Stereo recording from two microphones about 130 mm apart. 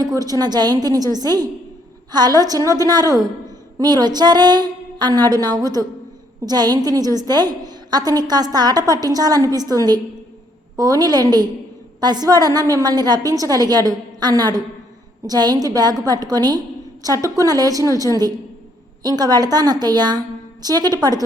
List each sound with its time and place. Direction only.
0.0 s a woman's voice: 30° right (ahead or behind)